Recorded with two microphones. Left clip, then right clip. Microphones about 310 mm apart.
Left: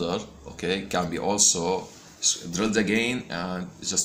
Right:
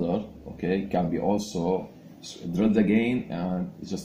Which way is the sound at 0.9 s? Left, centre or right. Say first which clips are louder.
Even; left.